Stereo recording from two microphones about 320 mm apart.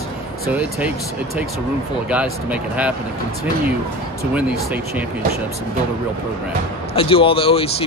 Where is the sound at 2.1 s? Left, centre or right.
Centre.